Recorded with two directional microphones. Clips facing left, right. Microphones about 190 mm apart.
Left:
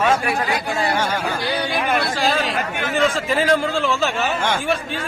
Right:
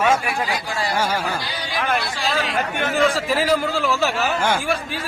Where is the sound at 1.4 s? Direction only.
55° left (ahead or behind).